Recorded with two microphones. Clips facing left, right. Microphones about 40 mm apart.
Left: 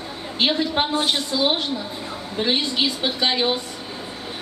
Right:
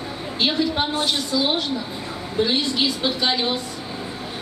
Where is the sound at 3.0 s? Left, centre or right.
Left.